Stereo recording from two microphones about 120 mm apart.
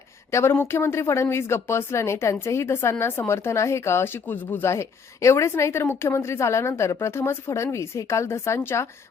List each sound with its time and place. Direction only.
0.3 s speech: 20° left (ahead or behind)